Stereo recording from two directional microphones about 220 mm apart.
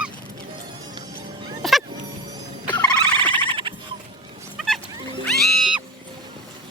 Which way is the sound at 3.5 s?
20° right (ahead or behind).